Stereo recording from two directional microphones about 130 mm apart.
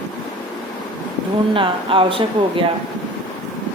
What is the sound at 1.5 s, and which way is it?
Speech, 40° right (ahead or behind).